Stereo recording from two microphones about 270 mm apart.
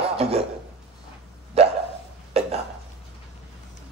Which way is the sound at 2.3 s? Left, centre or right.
Right.